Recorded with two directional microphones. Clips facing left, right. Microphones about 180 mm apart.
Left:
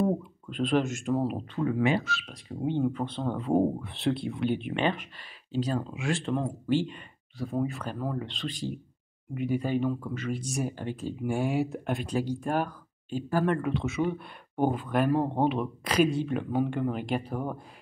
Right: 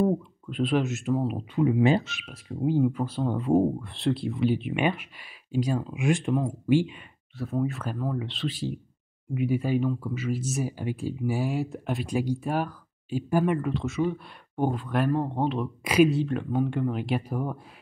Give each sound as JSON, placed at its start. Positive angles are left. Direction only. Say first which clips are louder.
{"t": 0.0, "sound": "speech", "louder": "right 3 dB", "side_deg": -5}
{"t": 1.5, "sound": "speech", "louder": "right 5 dB", "side_deg": -15}
{"t": 1.8, "sound": "speech", "louder": "right 4 dB", "side_deg": -25}
{"t": 2.2, "sound": "speech", "louder": "right 4 dB", "side_deg": -5}
{"t": 13.6, "sound": "speech", "louder": "right 1 dB", "side_deg": 0}
{"t": 15.8, "sound": "speech", "louder": "right 5 dB", "side_deg": -10}